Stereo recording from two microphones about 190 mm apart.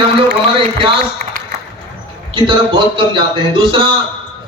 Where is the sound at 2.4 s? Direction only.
25° right (ahead or behind).